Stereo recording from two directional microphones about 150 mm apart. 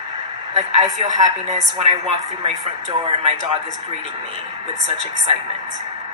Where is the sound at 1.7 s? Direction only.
35° right (ahead or behind).